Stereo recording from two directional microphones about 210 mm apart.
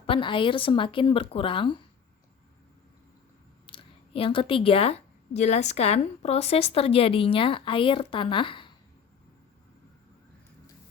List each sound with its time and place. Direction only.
0.0 s a woman's voice: 25° left (ahead or behind)
3.7 s a woman's voice: 25° left (ahead or behind)